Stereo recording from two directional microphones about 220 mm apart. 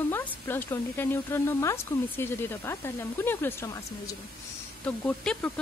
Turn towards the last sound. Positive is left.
turn(degrees=5)  # may be behind; listen again after turning